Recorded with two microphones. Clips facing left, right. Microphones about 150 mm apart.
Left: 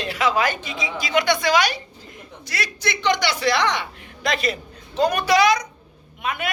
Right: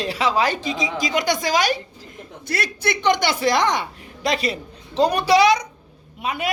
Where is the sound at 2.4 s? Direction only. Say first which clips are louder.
Right 4 dB; 55° right (ahead or behind).